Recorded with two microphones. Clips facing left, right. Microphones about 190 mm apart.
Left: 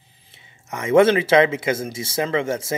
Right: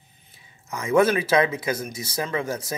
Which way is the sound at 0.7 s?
25° left (ahead or behind).